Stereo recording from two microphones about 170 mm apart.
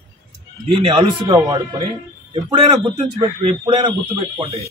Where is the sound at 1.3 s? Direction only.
25° right (ahead or behind).